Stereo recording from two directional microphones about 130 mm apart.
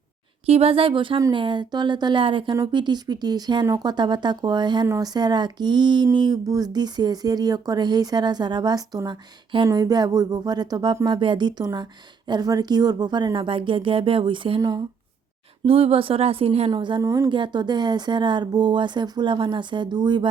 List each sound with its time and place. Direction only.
0.4 s speech: 50° right (ahead or behind); by 14.8 s 30° right (ahead or behind)
15.6 s speech: 50° right (ahead or behind)
16.7 s speech: 35° right (ahead or behind)
17.0 s a woman's voice: 25° right (ahead or behind)
17.2 s speech: 35° right (ahead or behind)